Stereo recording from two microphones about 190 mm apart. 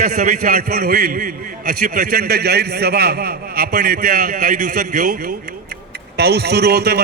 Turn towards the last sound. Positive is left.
turn(degrees=-55)  # may be behind; listen again after turning